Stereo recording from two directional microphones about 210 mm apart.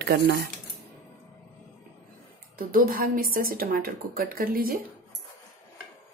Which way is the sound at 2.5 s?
40° right (ahead or behind).